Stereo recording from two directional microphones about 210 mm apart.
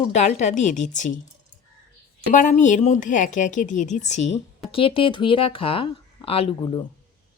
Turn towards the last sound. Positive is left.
turn(degrees=25)  # may be behind; listen again after turning